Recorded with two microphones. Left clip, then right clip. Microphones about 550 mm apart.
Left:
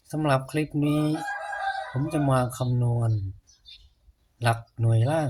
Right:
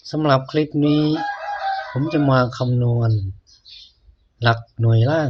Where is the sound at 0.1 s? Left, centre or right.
Left.